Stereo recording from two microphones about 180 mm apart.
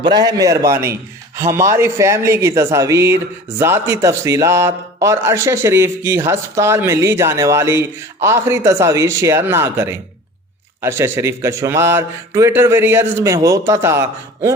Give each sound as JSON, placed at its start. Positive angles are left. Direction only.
{"t": 0.0, "sound": "a man's voice", "side_deg": -20}